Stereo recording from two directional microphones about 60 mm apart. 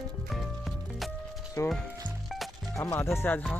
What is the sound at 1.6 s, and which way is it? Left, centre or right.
Speech, left.